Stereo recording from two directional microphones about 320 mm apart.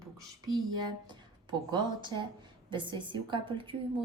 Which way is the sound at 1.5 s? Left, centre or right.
Centre.